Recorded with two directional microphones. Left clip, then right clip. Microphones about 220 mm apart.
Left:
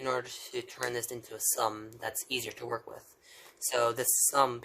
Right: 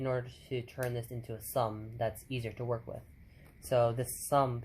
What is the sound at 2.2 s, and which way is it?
Speech, 30° left (ahead or behind).